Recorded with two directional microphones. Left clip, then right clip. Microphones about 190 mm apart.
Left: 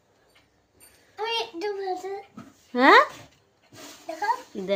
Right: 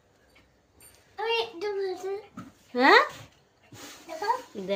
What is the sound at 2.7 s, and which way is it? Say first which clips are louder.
Speech: left 3 dB; 30° left (ahead or behind).